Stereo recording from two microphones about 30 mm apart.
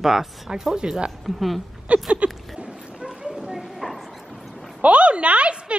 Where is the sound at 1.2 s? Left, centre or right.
Centre.